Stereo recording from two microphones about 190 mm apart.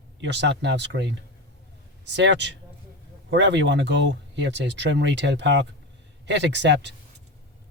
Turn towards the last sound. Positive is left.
turn(degrees=-65)  # may be behind; listen again after turning